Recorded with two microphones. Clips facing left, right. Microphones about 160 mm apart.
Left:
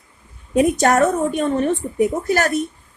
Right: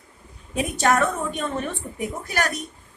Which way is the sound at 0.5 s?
45° left (ahead or behind).